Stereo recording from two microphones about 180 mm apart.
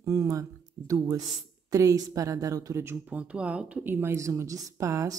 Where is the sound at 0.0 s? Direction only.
20° right (ahead or behind).